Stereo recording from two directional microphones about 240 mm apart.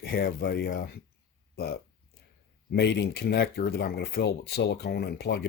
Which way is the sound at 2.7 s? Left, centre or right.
Left.